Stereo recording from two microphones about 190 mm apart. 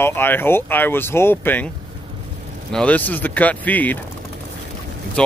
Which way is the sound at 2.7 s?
5° left (ahead or behind).